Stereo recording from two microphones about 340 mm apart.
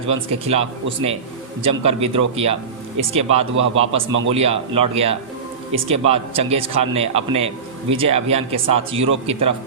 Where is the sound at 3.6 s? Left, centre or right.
Right.